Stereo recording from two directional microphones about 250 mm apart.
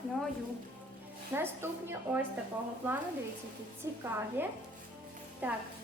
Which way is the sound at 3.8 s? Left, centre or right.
Centre.